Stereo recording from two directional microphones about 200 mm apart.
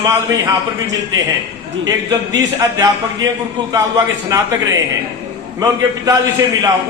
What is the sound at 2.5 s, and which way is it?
A man's voice, 15° right (ahead or behind).